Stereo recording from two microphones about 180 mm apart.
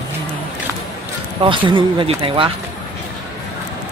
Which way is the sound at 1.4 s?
30° right (ahead or behind).